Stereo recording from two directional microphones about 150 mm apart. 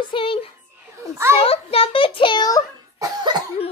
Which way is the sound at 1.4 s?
40° left (ahead or behind).